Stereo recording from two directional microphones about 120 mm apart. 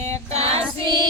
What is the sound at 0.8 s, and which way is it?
Child singing, 40° right (ahead or behind).